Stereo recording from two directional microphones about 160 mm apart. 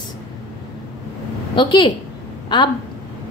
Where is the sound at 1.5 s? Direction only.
30° left (ahead or behind).